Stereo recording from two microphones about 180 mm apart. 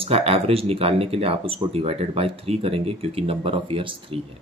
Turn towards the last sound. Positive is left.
turn(degrees=-30)  # may be behind; listen again after turning